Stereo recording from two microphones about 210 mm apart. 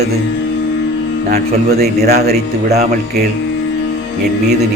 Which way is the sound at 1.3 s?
50° right (ahead or behind).